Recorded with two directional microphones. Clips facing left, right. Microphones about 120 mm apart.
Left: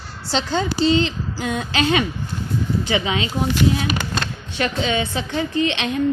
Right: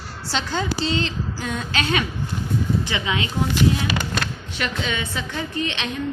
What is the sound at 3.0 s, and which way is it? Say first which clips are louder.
Speech: left 2 dB; 25° left (ahead or behind).